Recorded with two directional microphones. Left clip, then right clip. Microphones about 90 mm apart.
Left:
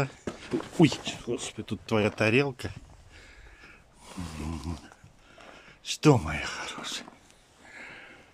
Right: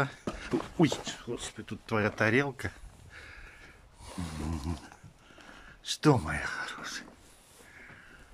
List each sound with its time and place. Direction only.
0.0 s a sound: 5° left (ahead or behind)
0.7 s speech: 20° left (ahead or behind)
3.2 s a sound: centre (ahead or behind)
5.7 s speech: 20° left (ahead or behind)
6.8 s speech: 40° left (ahead or behind)
7.7 s sniff: 90° left